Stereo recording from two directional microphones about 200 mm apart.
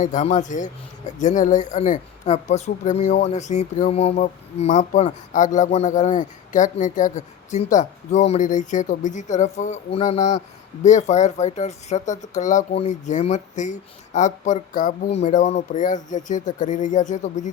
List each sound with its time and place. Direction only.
0.0 s speech: 35° left (ahead or behind)